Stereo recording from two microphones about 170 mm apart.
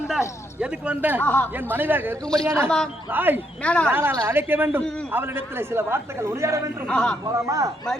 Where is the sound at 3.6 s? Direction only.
5° left (ahead or behind).